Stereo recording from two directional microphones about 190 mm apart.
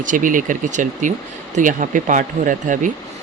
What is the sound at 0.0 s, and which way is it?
Speech, 45° right (ahead or behind).